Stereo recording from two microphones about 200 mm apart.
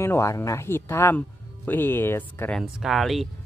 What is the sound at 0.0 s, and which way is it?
Speech, 15° left (ahead or behind).